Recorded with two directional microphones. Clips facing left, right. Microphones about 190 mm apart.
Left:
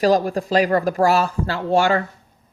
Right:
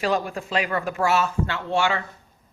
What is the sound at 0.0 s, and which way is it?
Speech, 40° left (ahead or behind).